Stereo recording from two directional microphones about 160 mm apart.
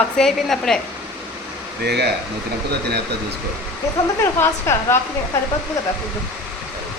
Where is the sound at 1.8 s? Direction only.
90° right.